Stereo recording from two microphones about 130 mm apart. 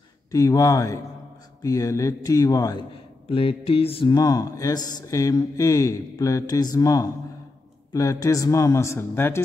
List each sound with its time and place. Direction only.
0.3 s speech: 25° left (ahead or behind)
3.3 s mantra: 45° left (ahead or behind)
4.1 s speech: 25° left (ahead or behind)